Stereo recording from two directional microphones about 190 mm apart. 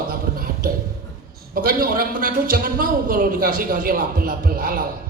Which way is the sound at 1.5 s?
50° right (ahead or behind).